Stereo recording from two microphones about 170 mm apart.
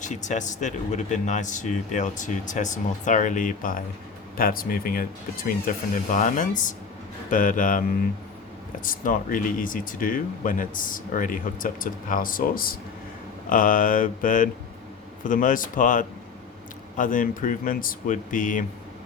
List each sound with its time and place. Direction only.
0.0 s speech: 45° left (ahead or behind)